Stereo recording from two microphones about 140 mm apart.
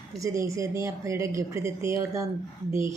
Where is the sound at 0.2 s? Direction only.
20° right (ahead or behind).